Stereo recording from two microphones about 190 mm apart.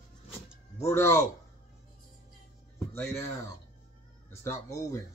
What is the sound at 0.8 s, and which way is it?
Speech, 15° left (ahead or behind).